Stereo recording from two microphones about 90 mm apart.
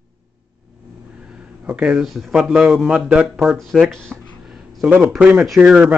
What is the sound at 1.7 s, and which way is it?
A man's voice, 15° right (ahead or behind).